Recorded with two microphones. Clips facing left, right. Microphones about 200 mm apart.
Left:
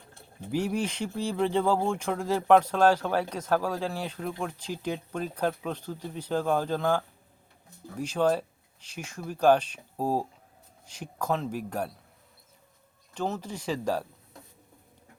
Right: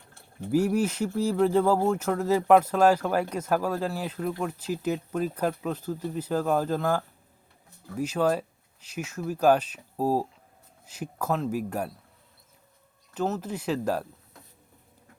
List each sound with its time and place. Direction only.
0.5 s speech: 5° right (ahead or behind)
13.1 s speech: 5° right (ahead or behind)